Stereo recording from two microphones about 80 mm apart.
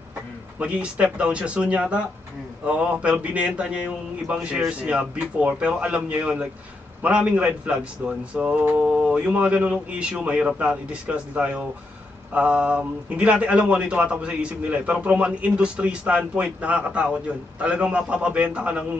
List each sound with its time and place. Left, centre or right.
0.6 s a man's voice: centre